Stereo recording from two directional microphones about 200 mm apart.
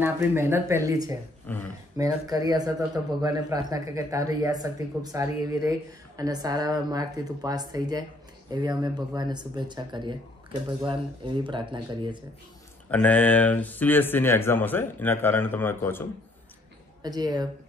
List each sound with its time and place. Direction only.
0.0 s speech: 10° right (ahead or behind)
1.5 s speech: 10° left (ahead or behind)
2.0 s speech: 20° right (ahead or behind)
12.9 s speech: 5° left (ahead or behind)
17.0 s speech: 20° right (ahead or behind)